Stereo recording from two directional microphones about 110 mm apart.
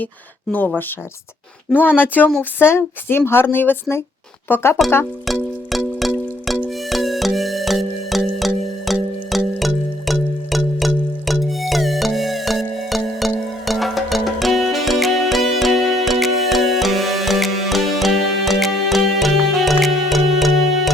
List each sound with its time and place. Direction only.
2.0 s a woman's voice: 15° left (ahead or behind)
5.2 s music: centre (ahead or behind)